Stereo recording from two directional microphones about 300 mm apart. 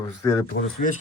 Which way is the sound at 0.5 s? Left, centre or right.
Left.